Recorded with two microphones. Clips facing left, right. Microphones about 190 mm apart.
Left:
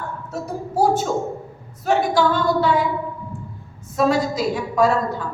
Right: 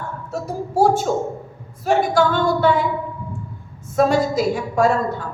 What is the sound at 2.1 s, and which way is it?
Speech, 50° right (ahead or behind).